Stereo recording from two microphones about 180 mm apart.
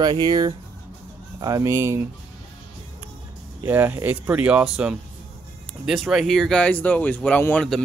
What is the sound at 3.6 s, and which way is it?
Speech, 10° right (ahead or behind).